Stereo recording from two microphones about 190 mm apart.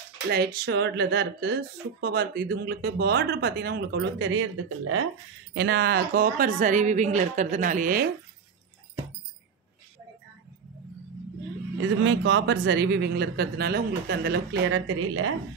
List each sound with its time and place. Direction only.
0.3 s a woman's voice: 55° right (ahead or behind); by 5.0 s 90° right
5.5 s a woman's voice: 65° right (ahead or behind); by 8.1 s 50° right (ahead or behind)
12.0 s a woman's voice: 75° right (ahead or behind)